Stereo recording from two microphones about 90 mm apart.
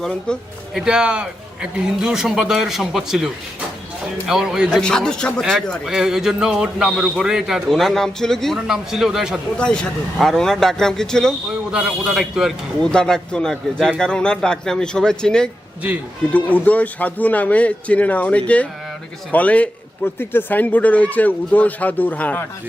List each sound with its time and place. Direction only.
0.0 s a man's voice: 10° left (ahead or behind)
0.7 s a man's voice: 5° right (ahead or behind)
4.8 s a man's voice: 10° left (ahead or behind)
5.8 s a man's voice: 5° right (ahead or behind)
9.6 s a man's voice: 10° left (ahead or behind)
11.7 s a man's voice: 10° right (ahead or behind); by 22.4 s 15° left (ahead or behind)